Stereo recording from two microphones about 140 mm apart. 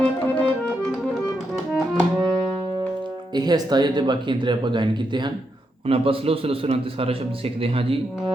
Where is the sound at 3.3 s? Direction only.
30° right (ahead or behind).